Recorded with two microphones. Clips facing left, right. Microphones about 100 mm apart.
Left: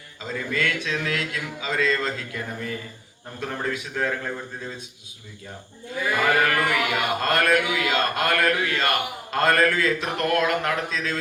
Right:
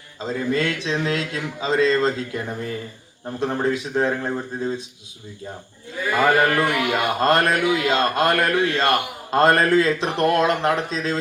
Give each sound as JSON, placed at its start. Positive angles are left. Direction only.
{"t": 0.2, "sound": "a man's voice", "side_deg": -35}
{"t": 6.2, "sound": "a man's voice", "side_deg": -30}